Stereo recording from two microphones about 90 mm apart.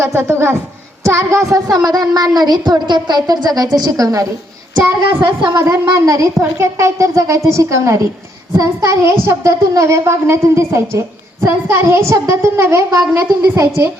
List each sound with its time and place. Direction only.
0.0 s a woman's voice: 30° right (ahead or behind)
5.6 s speech: 30° right (ahead or behind)